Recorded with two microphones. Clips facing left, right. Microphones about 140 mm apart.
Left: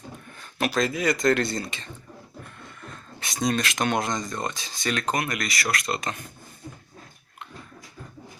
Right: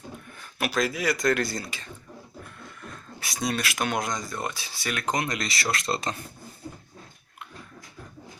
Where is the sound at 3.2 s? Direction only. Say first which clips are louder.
Left 4 dB; 5° right (ahead or behind).